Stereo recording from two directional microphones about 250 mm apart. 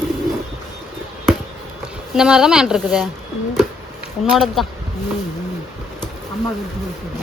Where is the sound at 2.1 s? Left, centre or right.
Centre.